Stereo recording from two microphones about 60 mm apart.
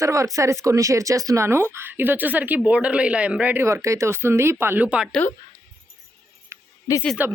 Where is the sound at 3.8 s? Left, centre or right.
Right.